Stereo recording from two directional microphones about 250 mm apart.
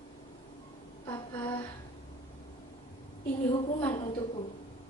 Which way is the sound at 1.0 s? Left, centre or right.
Centre.